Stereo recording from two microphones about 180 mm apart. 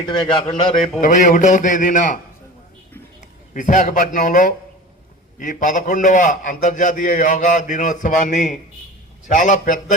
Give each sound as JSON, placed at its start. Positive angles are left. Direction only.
{"t": 0.0, "sound": "a man's voice", "side_deg": 25}
{"t": 1.0, "sound": "a man's voice", "side_deg": 45}
{"t": 3.2, "sound": "a man's voice", "side_deg": 45}